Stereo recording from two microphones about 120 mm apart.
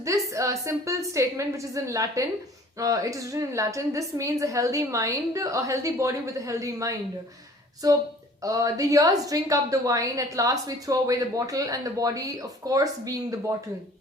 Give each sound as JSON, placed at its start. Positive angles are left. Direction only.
{"t": 0.0, "sound": "a woman's voice", "side_deg": -25}